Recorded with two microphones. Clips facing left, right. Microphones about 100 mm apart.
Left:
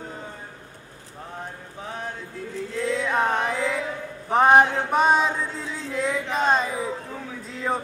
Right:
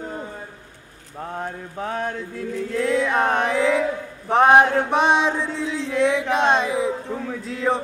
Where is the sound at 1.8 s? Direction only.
60° right (ahead or behind).